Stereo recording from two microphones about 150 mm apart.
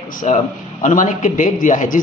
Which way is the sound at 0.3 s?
55° left (ahead or behind).